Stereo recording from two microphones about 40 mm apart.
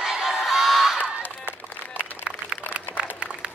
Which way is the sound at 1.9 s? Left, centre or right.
Right.